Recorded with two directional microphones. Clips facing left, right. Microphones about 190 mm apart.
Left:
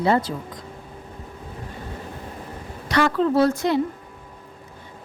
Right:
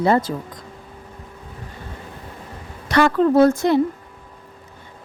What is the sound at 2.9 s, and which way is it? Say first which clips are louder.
Speech: right 4 dB; 50° right (ahead or behind).